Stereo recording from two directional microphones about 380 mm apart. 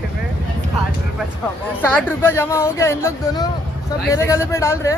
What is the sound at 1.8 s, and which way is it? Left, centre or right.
Speech, centre.